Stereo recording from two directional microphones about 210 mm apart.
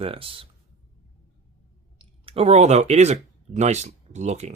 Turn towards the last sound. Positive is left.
turn(degrees=-35)  # may be behind; listen again after turning